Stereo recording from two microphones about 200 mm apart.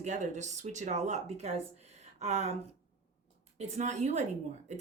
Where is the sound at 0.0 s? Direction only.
35° right (ahead or behind).